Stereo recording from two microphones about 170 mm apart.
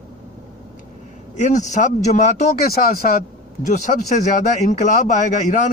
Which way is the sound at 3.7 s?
50° left (ahead or behind).